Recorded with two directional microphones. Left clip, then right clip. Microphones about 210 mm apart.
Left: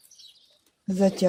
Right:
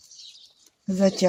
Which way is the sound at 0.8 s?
20° left (ahead or behind).